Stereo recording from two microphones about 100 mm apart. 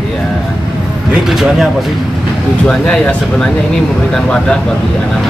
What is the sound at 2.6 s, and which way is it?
Speech, 10° left (ahead or behind).